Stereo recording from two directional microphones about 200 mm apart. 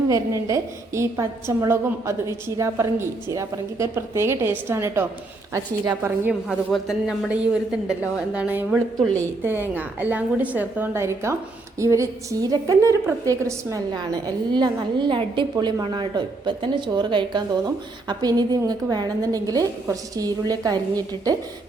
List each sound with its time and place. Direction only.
0.1 s a woman's voice: 15° right (ahead or behind)
6.7 s a woman's voice: centre (ahead or behind); by 21.3 s 20° right (ahead or behind)